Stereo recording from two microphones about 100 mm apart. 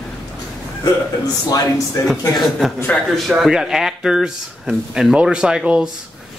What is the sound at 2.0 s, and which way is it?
A man's voice, centre (ahead or behind).